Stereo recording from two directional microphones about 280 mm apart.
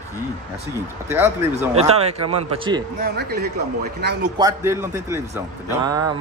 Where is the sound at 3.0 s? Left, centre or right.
Right.